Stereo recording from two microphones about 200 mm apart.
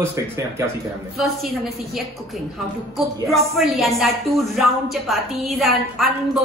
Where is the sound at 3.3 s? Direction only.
Centre (ahead or behind).